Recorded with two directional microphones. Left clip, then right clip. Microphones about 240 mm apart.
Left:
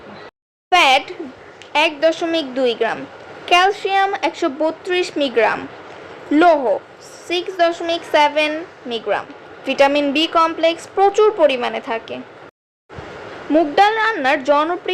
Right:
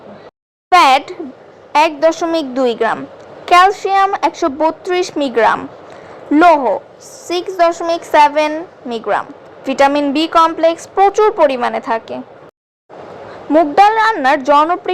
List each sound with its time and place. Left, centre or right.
0.7 s a sound: centre
1.7 s a woman's voice: centre
13.5 s a woman's voice: centre